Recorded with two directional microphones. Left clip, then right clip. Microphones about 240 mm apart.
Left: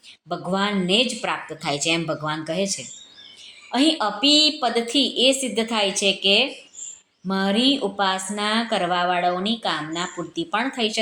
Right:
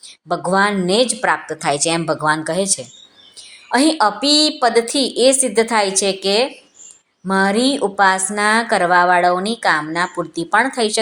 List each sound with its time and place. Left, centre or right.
0.3 s a woman's voice: right